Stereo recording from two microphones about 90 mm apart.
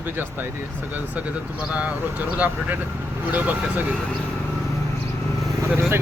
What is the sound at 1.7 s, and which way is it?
Speech, 15° right (ahead or behind).